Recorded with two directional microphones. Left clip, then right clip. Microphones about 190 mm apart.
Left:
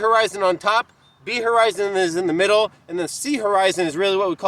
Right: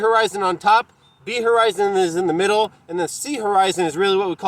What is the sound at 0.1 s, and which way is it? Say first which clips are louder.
Speech: even; 20° left (ahead or behind).